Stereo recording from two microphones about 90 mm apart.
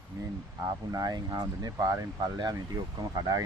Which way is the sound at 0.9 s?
45° right (ahead or behind).